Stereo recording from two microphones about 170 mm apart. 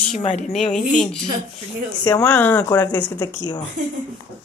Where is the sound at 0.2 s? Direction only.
40° left (ahead or behind).